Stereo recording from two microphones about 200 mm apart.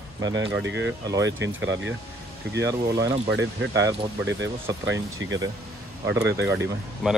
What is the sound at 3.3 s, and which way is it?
Speech, 65° right (ahead or behind).